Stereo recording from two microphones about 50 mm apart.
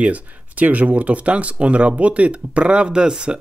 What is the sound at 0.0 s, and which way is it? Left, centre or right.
Speech, right.